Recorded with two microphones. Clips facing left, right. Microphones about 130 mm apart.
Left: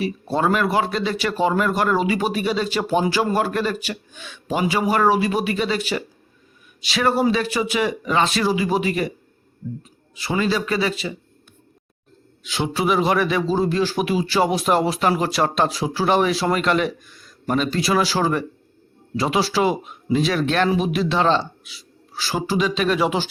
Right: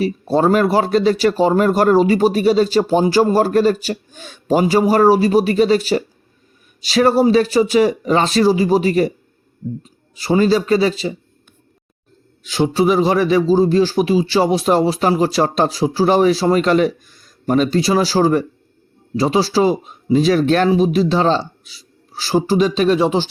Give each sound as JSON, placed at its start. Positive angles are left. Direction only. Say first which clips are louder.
{"t": 0.0, "sound": "a man's voice", "louder": "right 6 dB", "side_deg": -35}
{"t": 10.2, "sound": "a man's voice", "louder": "right 7 dB", "side_deg": -35}
{"t": 12.4, "sound": "a man's voice", "louder": "right 7 dB", "side_deg": -40}